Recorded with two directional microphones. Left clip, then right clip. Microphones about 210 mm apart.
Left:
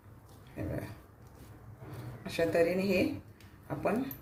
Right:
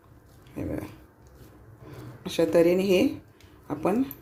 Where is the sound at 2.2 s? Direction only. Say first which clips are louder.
Right 7 dB; 35° right (ahead or behind).